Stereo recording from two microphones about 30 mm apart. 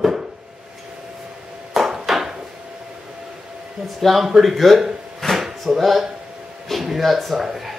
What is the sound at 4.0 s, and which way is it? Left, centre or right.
Speech, centre.